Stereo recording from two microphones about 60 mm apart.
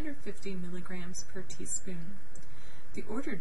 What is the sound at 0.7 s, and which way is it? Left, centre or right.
Speech, centre.